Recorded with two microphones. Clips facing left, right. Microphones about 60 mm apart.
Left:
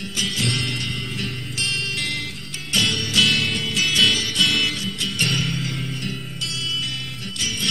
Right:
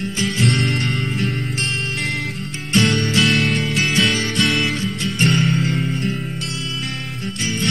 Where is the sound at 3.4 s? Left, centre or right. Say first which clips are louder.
Right 5 dB; right.